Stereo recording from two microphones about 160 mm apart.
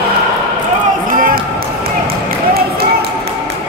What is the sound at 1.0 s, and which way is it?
Music, 60° right (ahead or behind).